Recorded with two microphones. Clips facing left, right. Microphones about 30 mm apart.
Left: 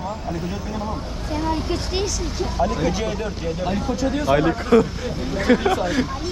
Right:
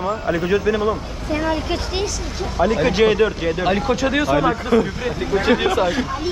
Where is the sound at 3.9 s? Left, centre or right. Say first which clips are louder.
Right 4 dB; right.